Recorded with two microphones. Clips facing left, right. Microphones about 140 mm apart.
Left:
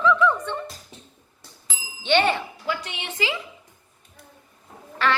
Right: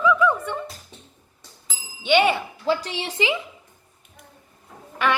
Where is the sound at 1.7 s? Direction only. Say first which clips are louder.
Right 2 dB; 10° right (ahead or behind).